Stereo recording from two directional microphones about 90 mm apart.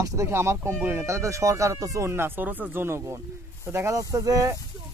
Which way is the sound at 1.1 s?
35° right (ahead or behind).